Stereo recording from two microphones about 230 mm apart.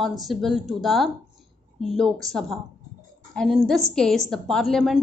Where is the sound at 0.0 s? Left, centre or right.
Centre.